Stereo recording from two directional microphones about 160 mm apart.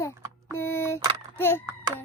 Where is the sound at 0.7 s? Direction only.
15° left (ahead or behind).